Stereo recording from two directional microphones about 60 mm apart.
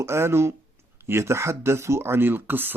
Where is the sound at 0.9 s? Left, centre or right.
Right.